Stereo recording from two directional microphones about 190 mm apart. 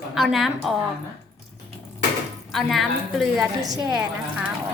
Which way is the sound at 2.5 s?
Centre (ahead or behind).